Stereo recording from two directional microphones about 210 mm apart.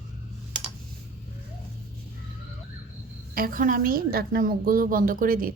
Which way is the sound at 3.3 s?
40° right (ahead or behind).